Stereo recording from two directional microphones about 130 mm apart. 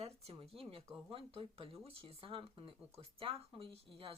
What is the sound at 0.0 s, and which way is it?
Speech, 50° right (ahead or behind).